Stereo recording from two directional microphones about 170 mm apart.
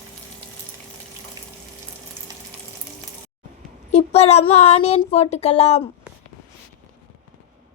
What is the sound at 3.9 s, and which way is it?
Speech, 40° left (ahead or behind).